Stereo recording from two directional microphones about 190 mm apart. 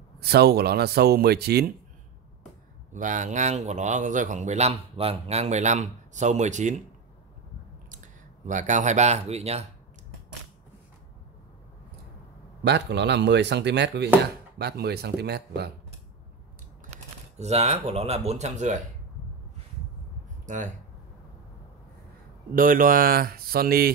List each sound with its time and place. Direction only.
0.2 s speech: 55° right (ahead or behind)
2.9 s speech: 40° right (ahead or behind)
7.9 s speech: 40° right (ahead or behind)
12.6 s speech: 65° right (ahead or behind)
16.9 s speech: 35° right (ahead or behind)
20.4 s speech: 40° right (ahead or behind)
22.6 s speech: 45° right (ahead or behind)